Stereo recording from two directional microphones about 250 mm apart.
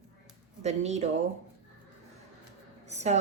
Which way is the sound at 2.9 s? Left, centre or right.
Right.